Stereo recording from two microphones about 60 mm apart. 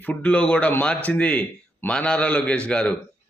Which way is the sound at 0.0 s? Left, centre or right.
Left.